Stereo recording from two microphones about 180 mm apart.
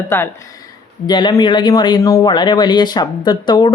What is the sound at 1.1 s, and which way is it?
A man's voice, 25° left (ahead or behind).